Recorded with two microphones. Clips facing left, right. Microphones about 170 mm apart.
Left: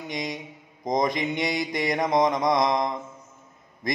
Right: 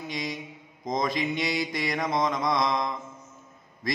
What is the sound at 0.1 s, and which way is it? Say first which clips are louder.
Mantra: left 3 dB; 20° left (ahead or behind).